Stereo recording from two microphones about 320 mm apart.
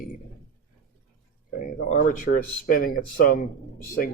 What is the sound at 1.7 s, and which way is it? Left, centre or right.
Speech, left.